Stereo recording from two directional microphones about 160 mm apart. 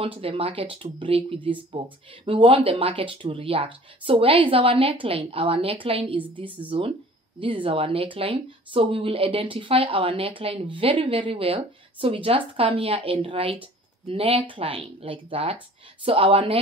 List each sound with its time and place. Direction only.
0.0 s speech: 35° right (ahead or behind)